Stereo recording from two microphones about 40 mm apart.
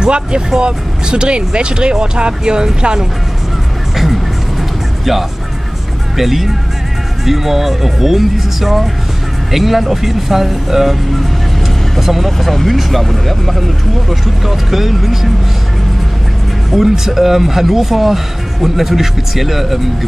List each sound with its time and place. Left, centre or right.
0.0 s speech: right
3.9 s music: centre
6.1 s speech: centre
16.7 s speech: centre